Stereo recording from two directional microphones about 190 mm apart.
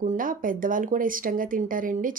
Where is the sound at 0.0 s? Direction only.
45° right (ahead or behind).